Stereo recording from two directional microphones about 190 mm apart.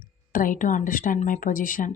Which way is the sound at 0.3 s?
45° left (ahead or behind).